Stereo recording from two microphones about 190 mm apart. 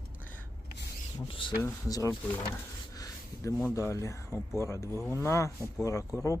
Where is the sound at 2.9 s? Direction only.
20° left (ahead or behind).